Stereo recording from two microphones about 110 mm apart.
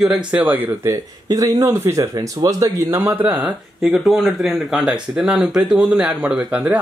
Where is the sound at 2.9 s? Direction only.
20° right (ahead or behind).